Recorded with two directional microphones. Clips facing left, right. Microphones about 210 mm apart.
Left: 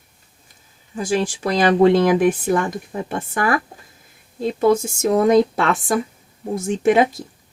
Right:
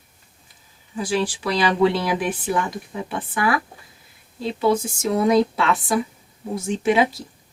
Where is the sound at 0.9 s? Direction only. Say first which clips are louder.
Left 2 dB; 45° left (ahead or behind).